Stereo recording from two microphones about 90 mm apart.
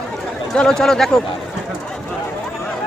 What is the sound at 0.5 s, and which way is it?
Speech, 10° left (ahead or behind).